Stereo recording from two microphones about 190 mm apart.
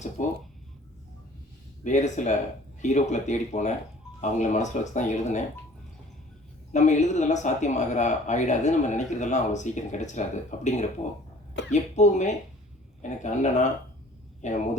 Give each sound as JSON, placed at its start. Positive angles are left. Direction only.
{"t": 0.2, "sound": "speech", "side_deg": 40}
{"t": 1.8, "sound": "speech", "side_deg": 40}
{"t": 6.7, "sound": "speech", "side_deg": 40}